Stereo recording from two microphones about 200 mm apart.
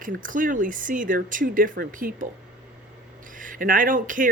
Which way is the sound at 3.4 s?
40° right (ahead or behind).